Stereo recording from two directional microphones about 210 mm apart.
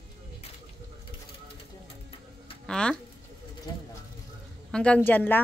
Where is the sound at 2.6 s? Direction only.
5° left (ahead or behind).